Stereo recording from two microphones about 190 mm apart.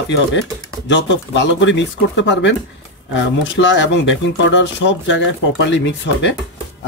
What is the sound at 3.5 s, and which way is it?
Speech, 70° left (ahead or behind).